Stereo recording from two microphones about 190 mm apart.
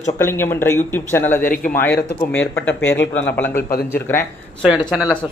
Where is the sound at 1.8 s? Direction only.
10° left (ahead or behind).